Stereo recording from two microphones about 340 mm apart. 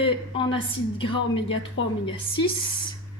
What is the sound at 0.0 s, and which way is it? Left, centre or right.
A woman's voice, centre.